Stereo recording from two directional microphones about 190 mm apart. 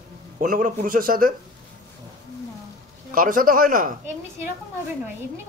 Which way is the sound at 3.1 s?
45° right (ahead or behind).